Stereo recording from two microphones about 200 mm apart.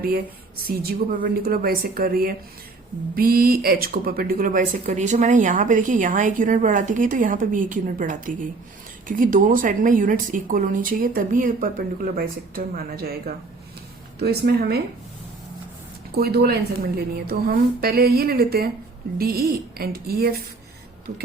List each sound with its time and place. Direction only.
0.8 s a woman's voice: 50° right (ahead or behind)
16.1 s a woman's voice: 50° right (ahead or behind)